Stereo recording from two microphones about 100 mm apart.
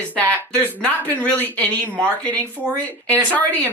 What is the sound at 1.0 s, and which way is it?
Speech, 20° right (ahead or behind).